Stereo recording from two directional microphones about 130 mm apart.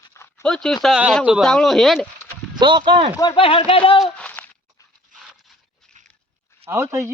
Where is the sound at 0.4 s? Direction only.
5° left (ahead or behind).